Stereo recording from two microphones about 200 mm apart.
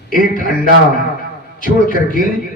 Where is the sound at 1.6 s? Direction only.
40° left (ahead or behind).